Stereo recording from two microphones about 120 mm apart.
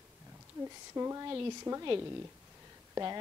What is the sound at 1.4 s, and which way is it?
Speech, 20° right (ahead or behind).